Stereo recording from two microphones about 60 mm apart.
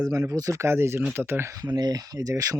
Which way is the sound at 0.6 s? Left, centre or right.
Right.